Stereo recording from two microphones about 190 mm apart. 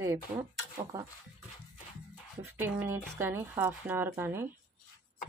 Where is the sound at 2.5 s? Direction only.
10° right (ahead or behind).